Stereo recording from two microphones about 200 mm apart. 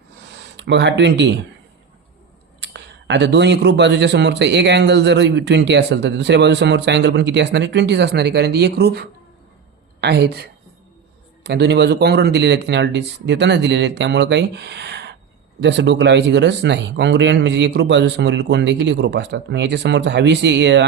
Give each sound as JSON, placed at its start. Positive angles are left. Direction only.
{"t": 0.5, "sound": "speech", "side_deg": -60}
{"t": 2.6, "sound": "speech", "side_deg": -60}